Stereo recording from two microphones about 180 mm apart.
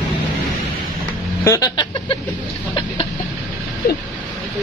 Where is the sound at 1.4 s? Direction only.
20° left (ahead or behind).